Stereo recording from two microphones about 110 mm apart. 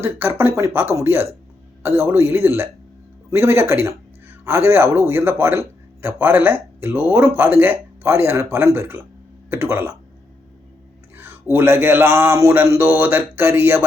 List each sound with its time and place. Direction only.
0.0 s a man's voice: 20° right (ahead or behind)
11.5 s a man's voice: 20° right (ahead or behind)